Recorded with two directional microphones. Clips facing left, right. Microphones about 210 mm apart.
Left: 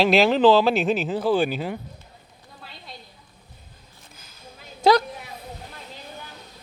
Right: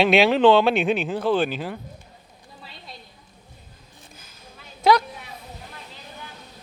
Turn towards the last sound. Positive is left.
turn(degrees=35)  # may be behind; listen again after turning